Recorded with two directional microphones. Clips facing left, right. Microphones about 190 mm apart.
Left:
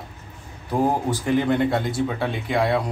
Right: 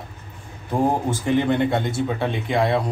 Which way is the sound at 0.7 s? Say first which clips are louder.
Right 1 dB; centre (ahead or behind).